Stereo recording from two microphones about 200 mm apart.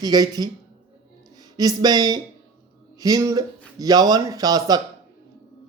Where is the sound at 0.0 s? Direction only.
20° right (ahead or behind).